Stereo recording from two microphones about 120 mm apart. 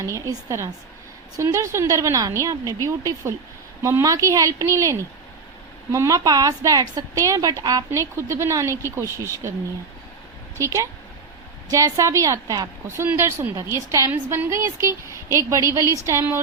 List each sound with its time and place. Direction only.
0.0 s a woman's voice: 25° right (ahead or behind)
10.6 s a woman's voice: 25° right (ahead or behind)